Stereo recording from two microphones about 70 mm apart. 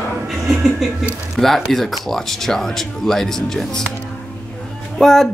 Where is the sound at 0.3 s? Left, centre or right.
Centre.